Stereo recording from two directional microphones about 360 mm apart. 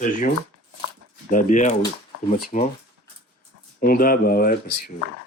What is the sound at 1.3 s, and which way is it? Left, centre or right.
Speech, left.